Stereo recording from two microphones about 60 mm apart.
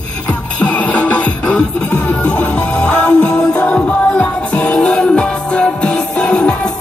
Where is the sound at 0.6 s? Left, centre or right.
Left.